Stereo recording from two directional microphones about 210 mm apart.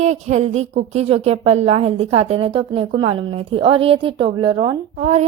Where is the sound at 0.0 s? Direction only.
35° right (ahead or behind).